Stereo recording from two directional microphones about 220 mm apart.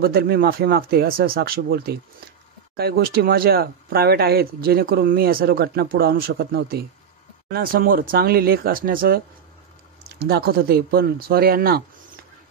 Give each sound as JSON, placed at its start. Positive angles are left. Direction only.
{"t": 0.0, "sound": "speech", "side_deg": -45}